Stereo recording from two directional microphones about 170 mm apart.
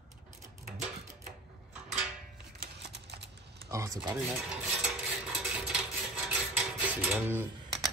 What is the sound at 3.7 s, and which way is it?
Speech, 15° right (ahead or behind).